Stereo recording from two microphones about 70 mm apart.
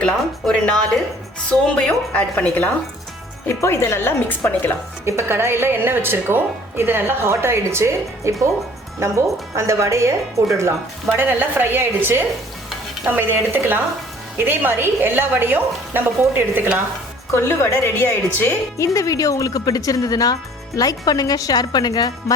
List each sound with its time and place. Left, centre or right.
0.0 s speech: centre
3.6 s a woman's voice: left
5.0 s speech: right
11.2 s a woman's voice: right
17.3 s a woman's voice: left
18.9 s speech: left